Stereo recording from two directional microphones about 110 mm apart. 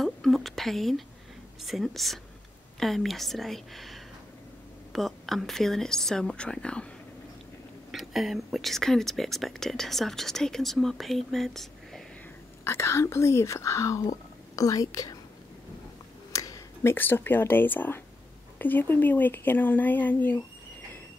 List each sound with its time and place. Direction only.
0.0 s whispering: centre (ahead or behind)
1.6 s speech: centre (ahead or behind)
7.9 s speech: centre (ahead or behind)
12.6 s speech: 25° left (ahead or behind)
16.3 s a sound: 30° left (ahead or behind)
16.9 s speech: 20° left (ahead or behind)